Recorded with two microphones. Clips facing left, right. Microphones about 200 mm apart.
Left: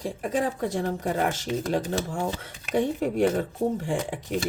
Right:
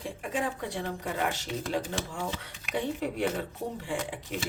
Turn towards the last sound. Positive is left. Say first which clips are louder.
# left 6 dB
turn(degrees=45)  # may be behind; listen again after turning